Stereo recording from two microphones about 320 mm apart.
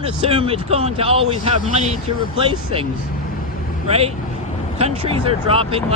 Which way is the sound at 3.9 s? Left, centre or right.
Centre.